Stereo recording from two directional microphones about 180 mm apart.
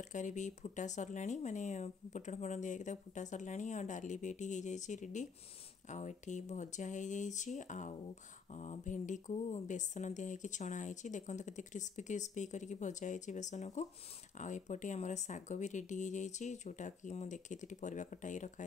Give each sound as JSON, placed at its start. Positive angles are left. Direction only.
{"t": 0.0, "sound": "speech", "side_deg": 40}